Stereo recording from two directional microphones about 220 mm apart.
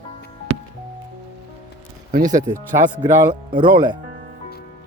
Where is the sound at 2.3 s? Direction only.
35° right (ahead or behind).